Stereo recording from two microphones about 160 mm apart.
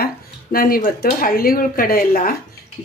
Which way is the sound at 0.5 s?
65° left (ahead or behind).